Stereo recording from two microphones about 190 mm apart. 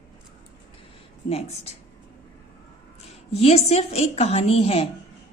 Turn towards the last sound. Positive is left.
turn(degrees=30)  # may be behind; listen again after turning